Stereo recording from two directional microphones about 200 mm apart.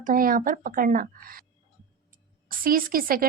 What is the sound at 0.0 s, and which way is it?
Speech, 45° right (ahead or behind).